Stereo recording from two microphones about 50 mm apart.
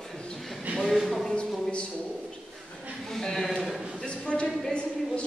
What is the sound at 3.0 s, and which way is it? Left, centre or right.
Speech, centre.